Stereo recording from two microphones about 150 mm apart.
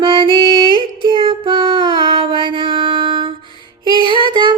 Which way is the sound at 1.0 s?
35° right (ahead or behind).